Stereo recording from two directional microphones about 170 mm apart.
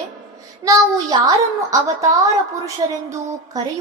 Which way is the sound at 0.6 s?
20° right (ahead or behind).